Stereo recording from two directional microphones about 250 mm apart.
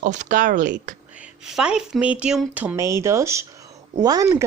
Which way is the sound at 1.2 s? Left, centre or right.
Centre.